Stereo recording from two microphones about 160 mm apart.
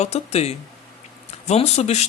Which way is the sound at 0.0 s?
40° left (ahead or behind).